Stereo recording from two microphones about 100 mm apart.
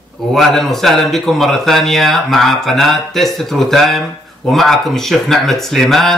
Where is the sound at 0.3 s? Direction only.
Centre (ahead or behind).